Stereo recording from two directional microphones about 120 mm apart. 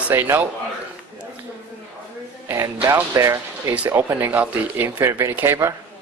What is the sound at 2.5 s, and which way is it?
Speech, 25° right (ahead or behind).